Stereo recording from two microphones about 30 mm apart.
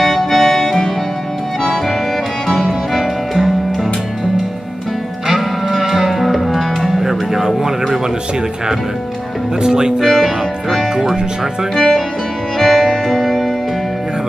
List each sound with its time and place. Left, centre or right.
0.0 s music: centre
2.4 s music: centre
2.9 s music: centre
5.9 s music: centre
6.9 s music: centre
10.0 s music: centre
11.7 s speech: centre
12.5 s music: centre